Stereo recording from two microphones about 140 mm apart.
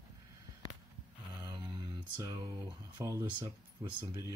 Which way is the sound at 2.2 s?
20° right (ahead or behind).